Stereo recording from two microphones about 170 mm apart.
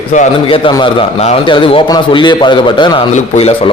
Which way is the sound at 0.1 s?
45° left (ahead or behind).